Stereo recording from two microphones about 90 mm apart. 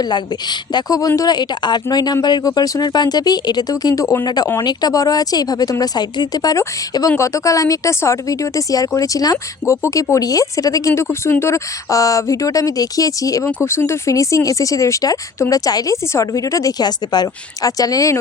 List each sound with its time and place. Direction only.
0.7 s speech: 50° left (ahead or behind)
13.7 s speech: 30° left (ahead or behind)